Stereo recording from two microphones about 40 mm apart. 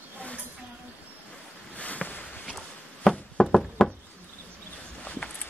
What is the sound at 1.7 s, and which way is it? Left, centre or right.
Boat, left.